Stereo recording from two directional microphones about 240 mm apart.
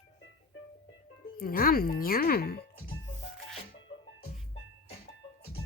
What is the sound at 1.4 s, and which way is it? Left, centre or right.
Child singing, left.